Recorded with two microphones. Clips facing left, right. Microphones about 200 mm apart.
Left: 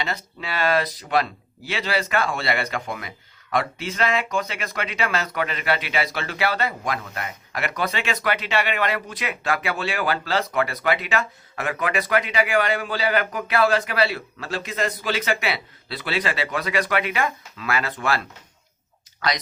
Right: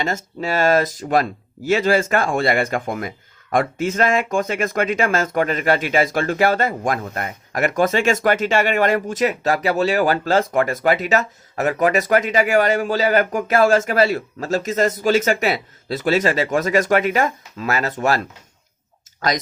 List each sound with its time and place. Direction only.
0.0 s speech: 45° right (ahead or behind)